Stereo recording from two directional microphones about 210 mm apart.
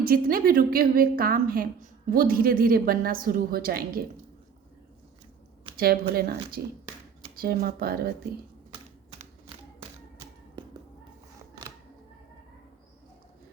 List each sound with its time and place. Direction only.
0.0 s a woman's voice: 45° right (ahead or behind)
5.7 s a woman's voice: 45° right (ahead or behind)